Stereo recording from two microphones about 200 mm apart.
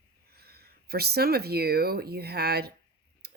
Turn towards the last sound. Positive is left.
turn(degrees=-55)  # may be behind; listen again after turning